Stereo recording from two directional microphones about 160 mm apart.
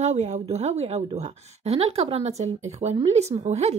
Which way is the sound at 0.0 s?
45° right (ahead or behind).